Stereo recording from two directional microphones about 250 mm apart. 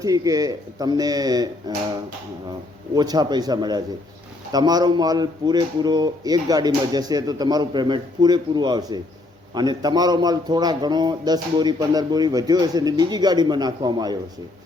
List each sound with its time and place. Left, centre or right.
0.0 s a man's voice: centre